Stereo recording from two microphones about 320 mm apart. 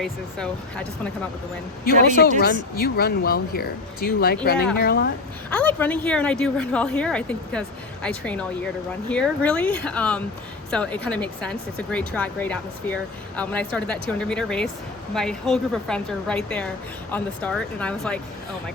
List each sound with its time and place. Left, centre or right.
0.0 s speech: centre
1.8 s speech: left
5.5 s speech: centre